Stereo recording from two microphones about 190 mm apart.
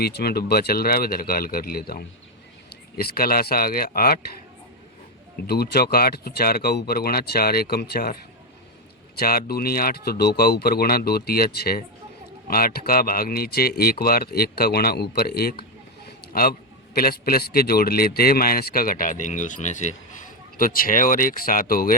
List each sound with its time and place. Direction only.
0.0 s a man's voice: 55° left (ahead or behind)
5.5 s a man's voice: 55° left (ahead or behind)